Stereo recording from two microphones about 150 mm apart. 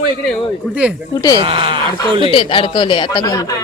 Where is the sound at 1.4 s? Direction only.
35° right (ahead or behind).